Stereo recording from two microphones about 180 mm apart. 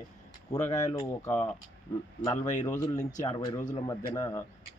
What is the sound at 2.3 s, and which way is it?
Speech, 40° left (ahead or behind).